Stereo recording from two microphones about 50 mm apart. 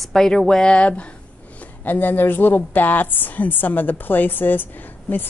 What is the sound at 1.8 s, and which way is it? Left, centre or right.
A woman's voice, left.